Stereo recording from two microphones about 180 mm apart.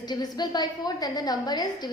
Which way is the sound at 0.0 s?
20° left (ahead or behind).